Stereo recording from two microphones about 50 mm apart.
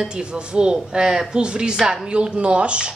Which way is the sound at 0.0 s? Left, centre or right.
Centre.